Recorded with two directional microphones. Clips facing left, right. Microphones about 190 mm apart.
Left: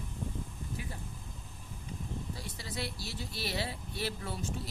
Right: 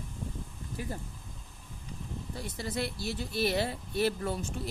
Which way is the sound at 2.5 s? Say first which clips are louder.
Right 7 dB; 50° right (ahead or behind).